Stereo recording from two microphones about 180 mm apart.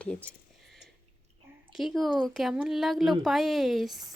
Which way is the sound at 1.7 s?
Centre (ahead or behind).